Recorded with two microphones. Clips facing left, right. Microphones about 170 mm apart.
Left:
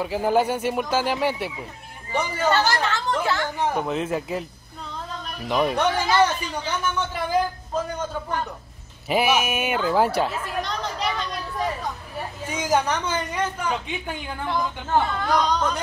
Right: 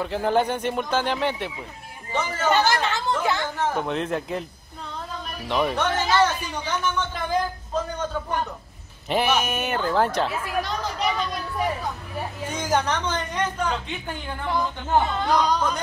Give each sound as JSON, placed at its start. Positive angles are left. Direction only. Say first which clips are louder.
{"t": 0.0, "sound": "speech", "louder": "left 1 dB", "side_deg": 5}
{"t": 2.5, "sound": "speech", "louder": "right 3 dB", "side_deg": -15}
{"t": 3.5, "sound": "speech", "louder": "left 1 dB", "side_deg": 15}
{"t": 5.5, "sound": "speech", "louder": "left 2 dB", "side_deg": 5}
{"t": 9.1, "sound": "speech", "louder": "left 1 dB", "side_deg": 10}
{"t": 10.6, "sound": "a sound", "louder": "right 1 dB", "side_deg": -5}
{"t": 12.4, "sound": "speech", "louder": "left 2 dB", "side_deg": 10}
{"t": 14.9, "sound": "speech", "louder": "right 1 dB", "side_deg": -10}